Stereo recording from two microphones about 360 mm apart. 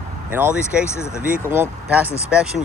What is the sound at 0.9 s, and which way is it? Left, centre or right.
Speech, centre.